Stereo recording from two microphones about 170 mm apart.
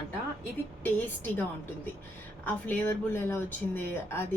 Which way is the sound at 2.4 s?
15° left (ahead or behind).